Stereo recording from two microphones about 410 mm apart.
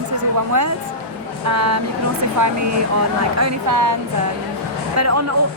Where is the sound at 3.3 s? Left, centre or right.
Right.